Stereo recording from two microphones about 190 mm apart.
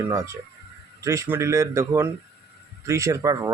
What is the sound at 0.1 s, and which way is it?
Speech, 15° right (ahead or behind).